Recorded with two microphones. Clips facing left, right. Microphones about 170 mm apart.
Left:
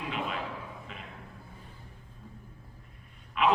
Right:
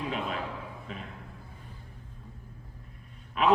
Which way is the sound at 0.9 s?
40° right (ahead or behind).